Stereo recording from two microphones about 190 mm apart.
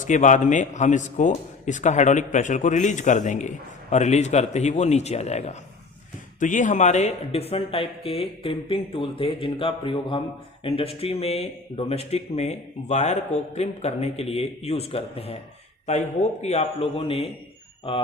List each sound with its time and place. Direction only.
0.0 s a man's voice: 40° left (ahead or behind)